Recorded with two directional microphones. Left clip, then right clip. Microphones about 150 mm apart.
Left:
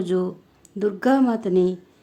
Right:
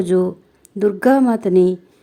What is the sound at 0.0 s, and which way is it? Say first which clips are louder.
A woman's voice: right 7 dB; 25° right (ahead or behind).